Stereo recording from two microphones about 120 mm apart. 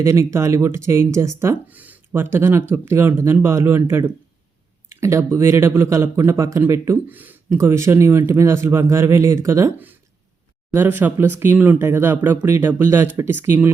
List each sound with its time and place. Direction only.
0.0 s speech: 25° right (ahead or behind)